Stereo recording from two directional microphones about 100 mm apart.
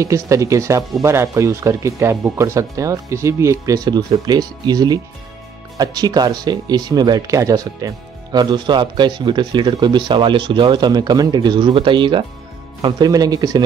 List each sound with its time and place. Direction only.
0.0 s speech: 30° right (ahead or behind)
11.5 s speech: 55° right (ahead or behind)
12.8 s speech: 40° right (ahead or behind)